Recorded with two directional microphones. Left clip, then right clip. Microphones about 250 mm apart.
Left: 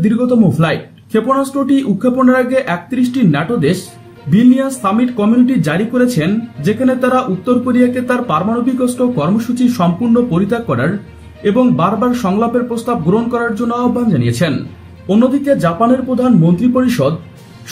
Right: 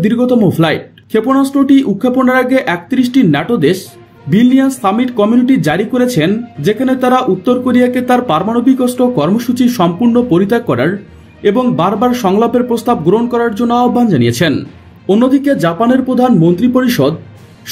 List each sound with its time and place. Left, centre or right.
0.0 s speech: right